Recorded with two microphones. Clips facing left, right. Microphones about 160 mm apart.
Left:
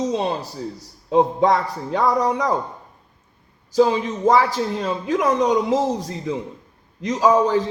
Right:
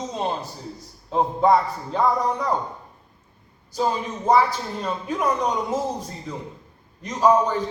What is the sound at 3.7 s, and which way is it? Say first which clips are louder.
A man's voice: left 7 dB; 90° left.